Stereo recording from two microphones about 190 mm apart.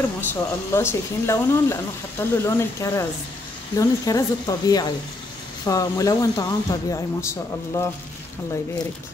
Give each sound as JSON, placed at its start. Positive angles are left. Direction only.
{"t": 0.2, "sound": "speech", "side_deg": 10}